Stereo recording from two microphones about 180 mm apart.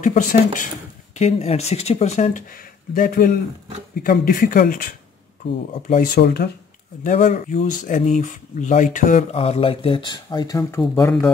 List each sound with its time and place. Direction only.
0.0 s speech: 45° left (ahead or behind)
5.9 s speech: 55° left (ahead or behind)
7.0 s speech: 45° left (ahead or behind); by 10.8 s 20° left (ahead or behind)